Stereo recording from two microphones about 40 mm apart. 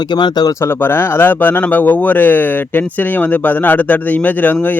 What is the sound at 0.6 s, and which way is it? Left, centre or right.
A man's voice, left.